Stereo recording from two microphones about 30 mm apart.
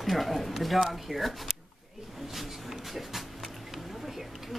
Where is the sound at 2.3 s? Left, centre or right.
Centre.